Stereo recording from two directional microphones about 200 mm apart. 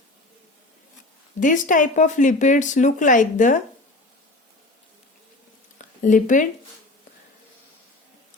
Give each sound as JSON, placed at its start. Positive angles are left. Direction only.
{"t": 1.4, "sound": "speech", "side_deg": 40}
{"t": 6.0, "sound": "speech", "side_deg": 40}